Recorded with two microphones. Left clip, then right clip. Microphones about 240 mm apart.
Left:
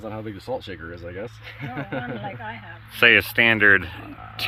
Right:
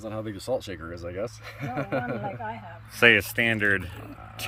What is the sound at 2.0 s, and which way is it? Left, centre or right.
Speech, right.